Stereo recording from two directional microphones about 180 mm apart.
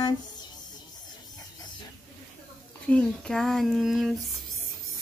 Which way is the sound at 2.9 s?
5° left (ahead or behind).